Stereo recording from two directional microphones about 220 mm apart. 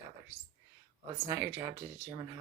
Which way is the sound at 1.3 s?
15° right (ahead or behind).